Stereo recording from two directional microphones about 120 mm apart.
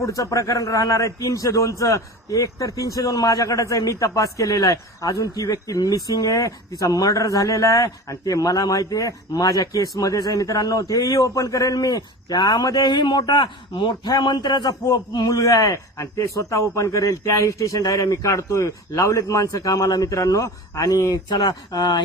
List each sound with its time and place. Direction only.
0.0 s a man's voice: 30° left (ahead or behind)